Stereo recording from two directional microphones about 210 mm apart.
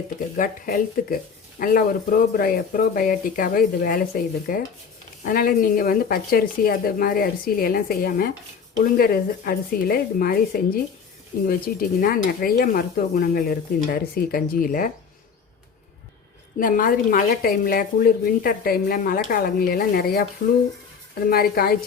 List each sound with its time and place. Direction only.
0.3 s speech: 40° left (ahead or behind)
16.6 s speech: 40° left (ahead or behind)
21.2 s speech: 45° left (ahead or behind)